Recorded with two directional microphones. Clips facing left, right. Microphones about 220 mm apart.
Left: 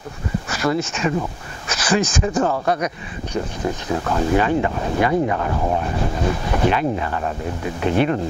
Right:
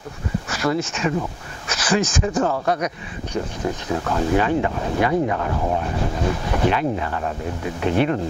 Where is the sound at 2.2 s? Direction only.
20° left (ahead or behind).